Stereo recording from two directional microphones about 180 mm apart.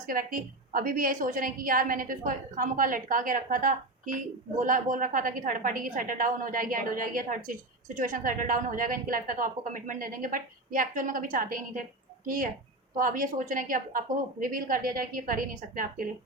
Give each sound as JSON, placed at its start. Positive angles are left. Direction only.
{"t": 0.0, "sound": "a woman's voice", "side_deg": -50}